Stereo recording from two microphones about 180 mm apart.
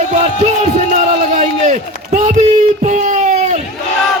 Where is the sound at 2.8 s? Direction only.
40° right (ahead or behind).